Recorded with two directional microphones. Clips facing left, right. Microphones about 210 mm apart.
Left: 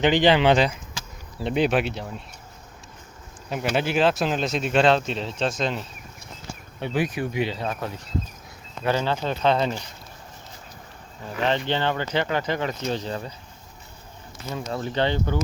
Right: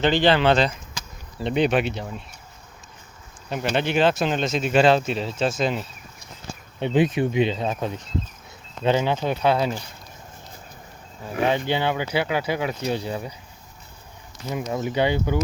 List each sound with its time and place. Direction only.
0.0 s speech: 15° left (ahead or behind)
3.5 s speech: 5° left (ahead or behind)
6.7 s speech: 20° right (ahead or behind)
11.4 s speech: 10° right (ahead or behind)
14.5 s speech: 15° right (ahead or behind)